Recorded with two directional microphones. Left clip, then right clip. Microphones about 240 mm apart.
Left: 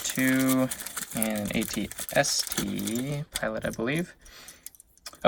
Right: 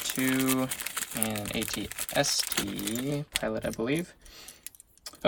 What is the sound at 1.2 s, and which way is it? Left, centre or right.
Speech, right.